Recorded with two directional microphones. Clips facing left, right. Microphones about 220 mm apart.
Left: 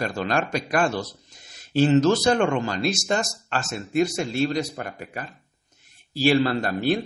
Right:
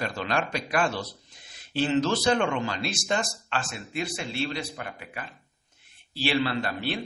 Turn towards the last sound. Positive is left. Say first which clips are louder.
# left 7 dB
turn(degrees=45)  # may be behind; listen again after turning